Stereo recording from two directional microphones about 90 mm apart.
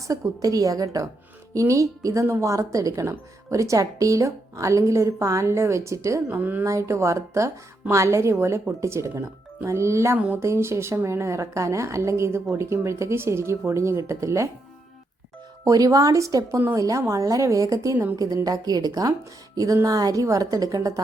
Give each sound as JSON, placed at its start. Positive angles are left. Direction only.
{"t": 0.0, "sound": "a woman's voice", "side_deg": -40}
{"t": 6.3, "sound": "speech", "side_deg": -20}
{"t": 6.7, "sound": "a woman's voice", "side_deg": -35}
{"t": 15.6, "sound": "a woman's voice", "side_deg": -40}